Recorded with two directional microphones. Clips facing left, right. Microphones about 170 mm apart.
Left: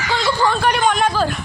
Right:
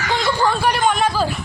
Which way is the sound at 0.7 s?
Centre (ahead or behind).